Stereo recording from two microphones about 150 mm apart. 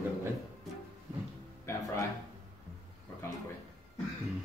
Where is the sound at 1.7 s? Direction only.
20° left (ahead or behind).